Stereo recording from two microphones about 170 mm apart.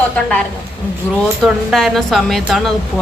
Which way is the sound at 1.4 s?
Centre (ahead or behind).